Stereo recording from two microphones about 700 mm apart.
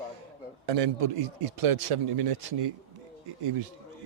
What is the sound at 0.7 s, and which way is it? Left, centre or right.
Speech, right.